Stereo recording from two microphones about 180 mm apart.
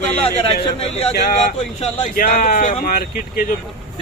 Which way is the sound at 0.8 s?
35° left (ahead or behind).